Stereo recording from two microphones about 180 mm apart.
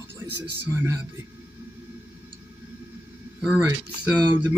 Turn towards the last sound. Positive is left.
turn(degrees=-10)  # may be behind; listen again after turning